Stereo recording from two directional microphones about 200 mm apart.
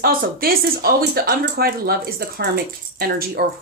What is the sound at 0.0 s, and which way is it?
Speech, 50° right (ahead or behind).